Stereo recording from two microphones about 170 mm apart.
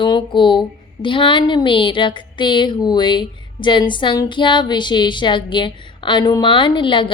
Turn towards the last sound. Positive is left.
turn(degrees=30)  # may be behind; listen again after turning